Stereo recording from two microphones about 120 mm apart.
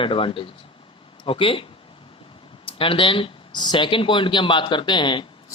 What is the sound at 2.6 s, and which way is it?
A man's voice, 50° left (ahead or behind).